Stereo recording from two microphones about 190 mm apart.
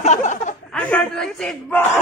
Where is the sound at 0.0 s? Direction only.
40° left (ahead or behind).